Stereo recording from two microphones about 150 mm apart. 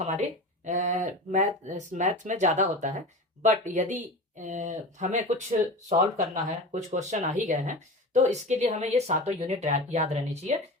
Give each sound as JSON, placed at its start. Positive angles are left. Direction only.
{"t": 0.0, "sound": "speech", "side_deg": -50}